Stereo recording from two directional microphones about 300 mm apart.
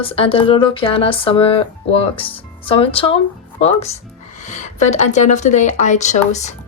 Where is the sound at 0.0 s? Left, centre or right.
Centre.